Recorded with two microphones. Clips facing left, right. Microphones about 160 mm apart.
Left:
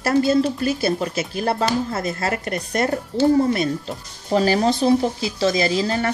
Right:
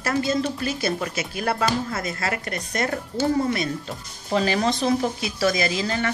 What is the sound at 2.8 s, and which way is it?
Speech, 30° left (ahead or behind).